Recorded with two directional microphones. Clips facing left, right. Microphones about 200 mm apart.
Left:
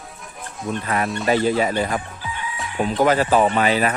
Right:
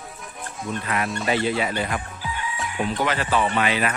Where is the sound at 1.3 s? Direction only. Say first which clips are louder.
Left 5 dB; 40° left (ahead or behind).